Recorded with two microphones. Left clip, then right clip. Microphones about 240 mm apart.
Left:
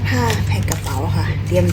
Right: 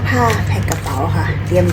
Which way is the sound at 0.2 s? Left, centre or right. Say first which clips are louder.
Right 5 dB; centre.